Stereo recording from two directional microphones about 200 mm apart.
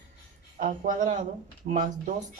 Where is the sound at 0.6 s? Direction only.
40° right (ahead or behind).